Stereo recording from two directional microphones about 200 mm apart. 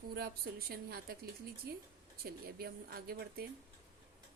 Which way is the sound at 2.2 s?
50° right (ahead or behind).